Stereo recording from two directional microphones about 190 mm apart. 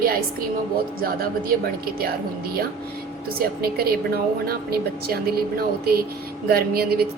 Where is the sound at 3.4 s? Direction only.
50° right (ahead or behind).